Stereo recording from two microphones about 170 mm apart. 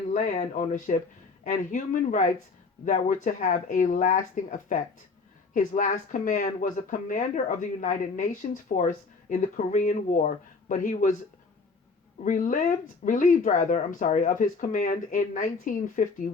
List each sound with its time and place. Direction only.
0.1 s speech: 45° left (ahead or behind)
12.2 s speech: 50° left (ahead or behind)